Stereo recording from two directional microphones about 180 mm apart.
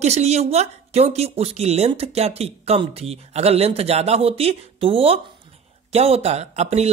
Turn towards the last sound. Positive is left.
turn(degrees=-35)  # may be behind; listen again after turning